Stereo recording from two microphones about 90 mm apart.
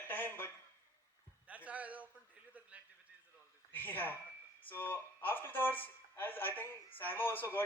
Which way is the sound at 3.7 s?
20° left (ahead or behind).